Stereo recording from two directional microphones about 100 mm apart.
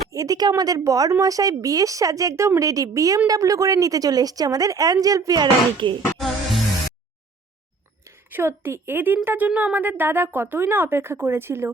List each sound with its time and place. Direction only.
0.1 s a woman's voice: 35° right (ahead or behind)
6.1 s music: centre (ahead or behind)
8.3 s speech: 20° right (ahead or behind)